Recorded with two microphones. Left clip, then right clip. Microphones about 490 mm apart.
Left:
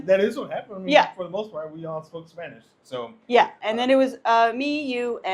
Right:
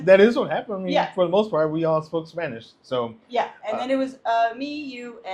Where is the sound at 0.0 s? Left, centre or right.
Right.